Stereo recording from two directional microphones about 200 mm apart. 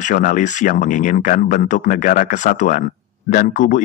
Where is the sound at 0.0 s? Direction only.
40° left (ahead or behind).